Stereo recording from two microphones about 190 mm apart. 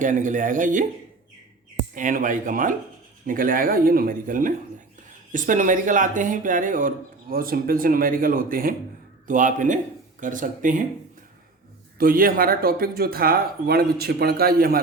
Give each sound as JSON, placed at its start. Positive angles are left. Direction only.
{"t": 0.0, "sound": "speech", "side_deg": -40}
{"t": 2.0, "sound": "speech", "side_deg": -45}
{"t": 11.9, "sound": "speech", "side_deg": -50}